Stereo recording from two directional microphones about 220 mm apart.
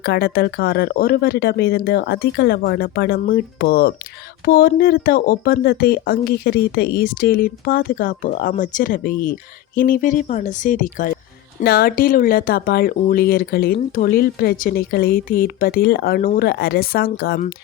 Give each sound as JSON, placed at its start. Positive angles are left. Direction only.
{"t": 0.0, "sound": "speech", "side_deg": 45}